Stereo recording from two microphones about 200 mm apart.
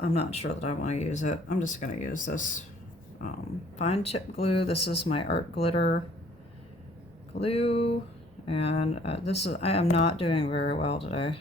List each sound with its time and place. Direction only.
0.0 s speech: 30° left (ahead or behind)
3.8 s speech: 30° left (ahead or behind)
7.3 s speech: 30° left (ahead or behind)